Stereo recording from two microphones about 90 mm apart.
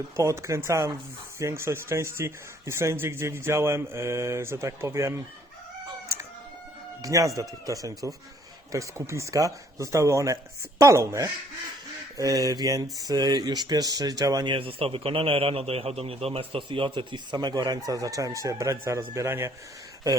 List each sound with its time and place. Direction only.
0.2 s speech: 35° right (ahead or behind)
7.0 s speech: 40° right (ahead or behind)
14.4 s a man's voice: 75° right (ahead or behind); by 19.5 s 30° right (ahead or behind)